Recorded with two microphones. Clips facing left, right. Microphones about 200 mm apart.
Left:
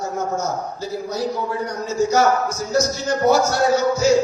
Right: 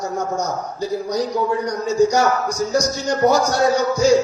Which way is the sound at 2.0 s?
15° right (ahead or behind).